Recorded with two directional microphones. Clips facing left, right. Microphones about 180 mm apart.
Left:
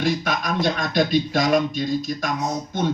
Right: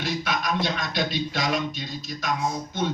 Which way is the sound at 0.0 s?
50° left (ahead or behind).